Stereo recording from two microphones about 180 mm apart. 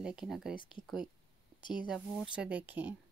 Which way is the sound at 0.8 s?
5° right (ahead or behind).